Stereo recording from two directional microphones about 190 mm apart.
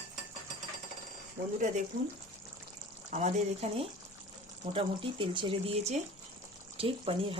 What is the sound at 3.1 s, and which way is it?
Speech, 40° right (ahead or behind).